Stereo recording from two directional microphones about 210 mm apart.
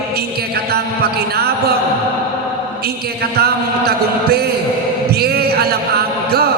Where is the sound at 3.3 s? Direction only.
50° right (ahead or behind).